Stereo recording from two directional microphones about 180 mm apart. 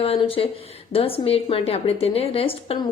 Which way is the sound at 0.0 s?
30° left (ahead or behind).